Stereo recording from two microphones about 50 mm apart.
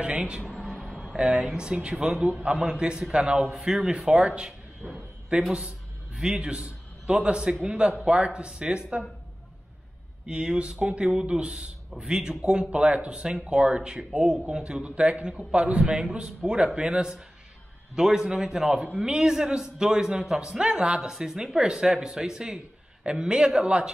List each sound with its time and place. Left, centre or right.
0.0 s a man's voice: right
0.8 s a sound: centre
1.1 s a man's voice: centre
3.4 s a man's voice: centre
4.8 s a sound: centre
6.1 s a man's voice: centre
10.2 s a man's voice: centre